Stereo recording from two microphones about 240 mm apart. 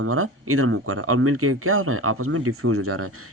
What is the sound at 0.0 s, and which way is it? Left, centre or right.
Speech, right.